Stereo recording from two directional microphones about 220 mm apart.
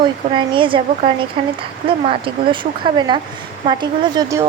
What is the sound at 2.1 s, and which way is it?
A woman's voice, 25° right (ahead or behind).